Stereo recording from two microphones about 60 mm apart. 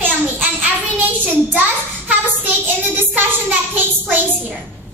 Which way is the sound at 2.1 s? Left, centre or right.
Right.